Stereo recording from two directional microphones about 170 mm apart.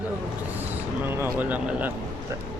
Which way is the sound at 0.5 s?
10° right (ahead or behind).